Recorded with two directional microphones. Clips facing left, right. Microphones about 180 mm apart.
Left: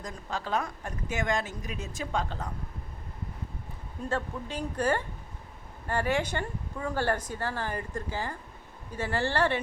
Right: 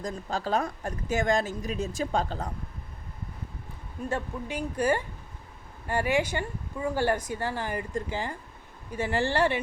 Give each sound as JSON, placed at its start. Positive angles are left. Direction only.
{"t": 0.0, "sound": "speech", "side_deg": -35}
{"t": 4.1, "sound": "speech", "side_deg": -10}